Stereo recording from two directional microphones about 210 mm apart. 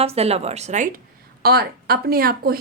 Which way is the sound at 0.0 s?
30° right (ahead or behind).